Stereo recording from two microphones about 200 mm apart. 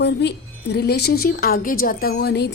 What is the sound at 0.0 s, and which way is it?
Speech, 55° left (ahead or behind).